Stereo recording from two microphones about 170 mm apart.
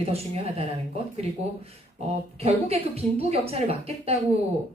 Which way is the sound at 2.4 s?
35° right (ahead or behind).